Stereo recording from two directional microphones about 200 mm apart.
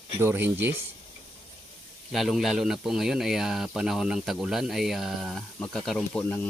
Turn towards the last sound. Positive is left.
turn(degrees=5)  # may be behind; listen again after turning